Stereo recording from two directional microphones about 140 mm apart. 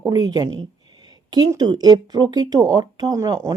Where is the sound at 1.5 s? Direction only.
30° right (ahead or behind).